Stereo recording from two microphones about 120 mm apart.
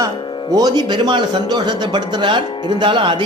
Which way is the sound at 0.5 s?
35° right (ahead or behind).